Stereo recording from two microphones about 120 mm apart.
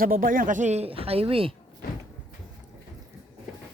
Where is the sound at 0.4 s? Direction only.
90° right; by 1.5 s 50° right (ahead or behind).